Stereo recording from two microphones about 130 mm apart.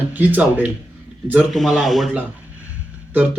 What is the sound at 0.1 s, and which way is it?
Speech, 15° right (ahead or behind).